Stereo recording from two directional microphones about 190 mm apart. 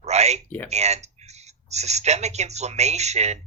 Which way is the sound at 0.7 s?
35° right (ahead or behind).